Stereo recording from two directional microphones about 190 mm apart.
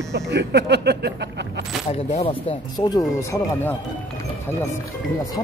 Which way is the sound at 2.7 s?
20° left (ahead or behind).